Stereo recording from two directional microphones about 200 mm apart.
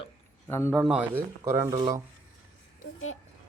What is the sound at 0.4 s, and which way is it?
Speech, 10° left (ahead or behind).